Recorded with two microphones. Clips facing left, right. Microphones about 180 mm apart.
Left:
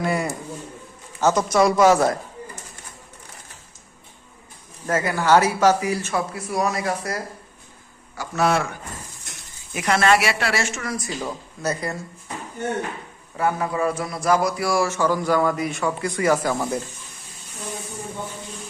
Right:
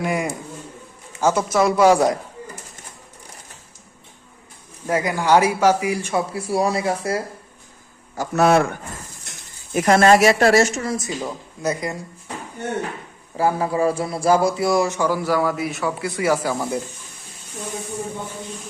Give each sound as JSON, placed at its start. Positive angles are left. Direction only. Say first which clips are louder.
{"t": 0.0, "sound": "a man's voice", "louder": "right 1 dB", "side_deg": -15}
{"t": 4.9, "sound": "a man's voice", "louder": "right 1 dB", "side_deg": -15}
{"t": 6.1, "sound": "speech", "louder": "right 3 dB", "side_deg": -30}
{"t": 8.1, "sound": "a man's voice", "louder": "right 5 dB", "side_deg": -45}
{"t": 9.7, "sound": "a man's voice", "louder": "right 5 dB", "side_deg": -45}
{"t": 10.8, "sound": "speech", "louder": "right 3 dB", "side_deg": -25}
{"t": 11.2, "sound": "a man's voice", "louder": "right 2 dB", "side_deg": -10}
{"t": 13.3, "sound": "a man's voice", "louder": "right 3 dB", "side_deg": -30}